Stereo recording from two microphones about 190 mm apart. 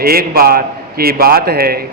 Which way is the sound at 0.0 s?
50° right (ahead or behind).